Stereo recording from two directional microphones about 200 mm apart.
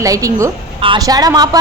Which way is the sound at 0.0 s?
15° right (ahead or behind).